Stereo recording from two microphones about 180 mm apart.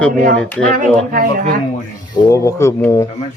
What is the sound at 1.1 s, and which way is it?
Speech, 55° right (ahead or behind).